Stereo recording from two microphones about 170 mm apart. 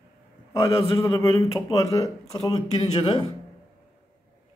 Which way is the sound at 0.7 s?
30° left (ahead or behind).